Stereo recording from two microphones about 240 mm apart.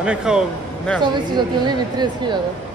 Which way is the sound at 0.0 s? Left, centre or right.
Centre.